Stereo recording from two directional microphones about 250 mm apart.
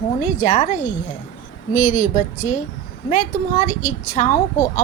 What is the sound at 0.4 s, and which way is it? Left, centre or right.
A woman's voice, left.